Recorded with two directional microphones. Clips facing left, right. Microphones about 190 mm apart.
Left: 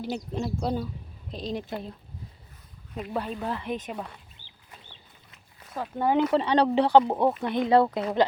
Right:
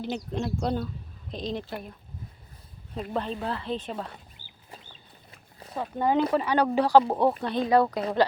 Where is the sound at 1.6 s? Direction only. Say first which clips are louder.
Left 2 dB; 20° left (ahead or behind).